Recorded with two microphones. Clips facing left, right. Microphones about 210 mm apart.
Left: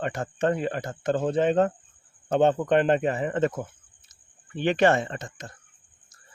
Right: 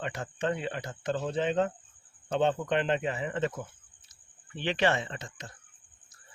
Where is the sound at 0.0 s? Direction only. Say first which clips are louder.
Left 6 dB; 50° left (ahead or behind).